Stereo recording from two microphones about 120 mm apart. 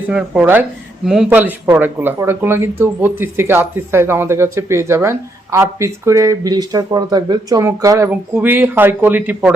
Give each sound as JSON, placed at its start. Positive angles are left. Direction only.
{"t": 0.1, "sound": "a man's voice", "side_deg": -5}
{"t": 1.3, "sound": "speech", "side_deg": -15}
{"t": 8.1, "sound": "speech", "side_deg": -15}